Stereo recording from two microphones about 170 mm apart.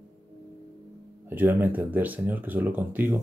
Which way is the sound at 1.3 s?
10° right (ahead or behind).